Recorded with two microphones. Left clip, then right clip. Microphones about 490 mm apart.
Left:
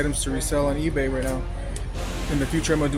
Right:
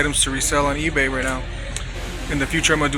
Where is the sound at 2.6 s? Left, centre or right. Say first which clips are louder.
Right 6 dB; left.